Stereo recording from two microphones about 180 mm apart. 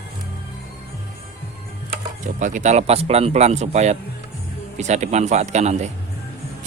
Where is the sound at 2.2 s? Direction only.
45° right (ahead or behind).